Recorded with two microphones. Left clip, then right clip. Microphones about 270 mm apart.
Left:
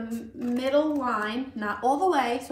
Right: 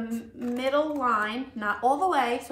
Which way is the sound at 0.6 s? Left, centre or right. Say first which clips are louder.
Left 1 dB; centre.